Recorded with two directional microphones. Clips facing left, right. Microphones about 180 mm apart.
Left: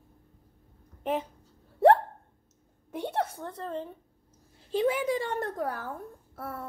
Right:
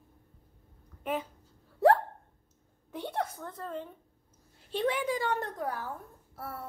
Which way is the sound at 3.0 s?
25° left (ahead or behind).